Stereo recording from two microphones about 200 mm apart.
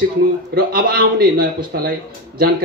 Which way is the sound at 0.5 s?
50° right (ahead or behind).